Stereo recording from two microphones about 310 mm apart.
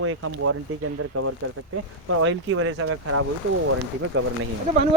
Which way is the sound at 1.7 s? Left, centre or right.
Right.